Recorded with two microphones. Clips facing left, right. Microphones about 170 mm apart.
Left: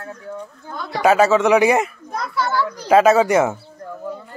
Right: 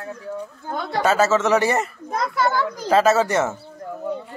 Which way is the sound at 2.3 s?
45° right (ahead or behind).